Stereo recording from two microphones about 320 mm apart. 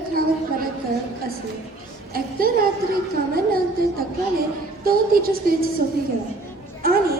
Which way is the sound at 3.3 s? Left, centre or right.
Right.